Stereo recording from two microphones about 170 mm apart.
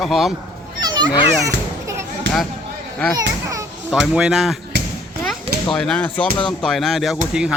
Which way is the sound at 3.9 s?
5° right (ahead or behind).